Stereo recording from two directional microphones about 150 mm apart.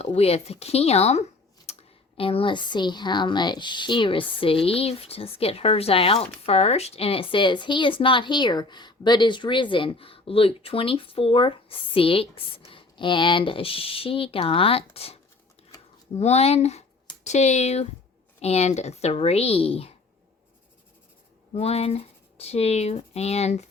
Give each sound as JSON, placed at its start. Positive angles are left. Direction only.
{"t": 0.0, "sound": "a woman's voice", "side_deg": 45}
{"t": 21.5, "sound": "speech", "side_deg": 45}